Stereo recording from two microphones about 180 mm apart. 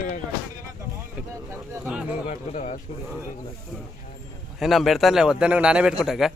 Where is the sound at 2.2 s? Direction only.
40° left (ahead or behind).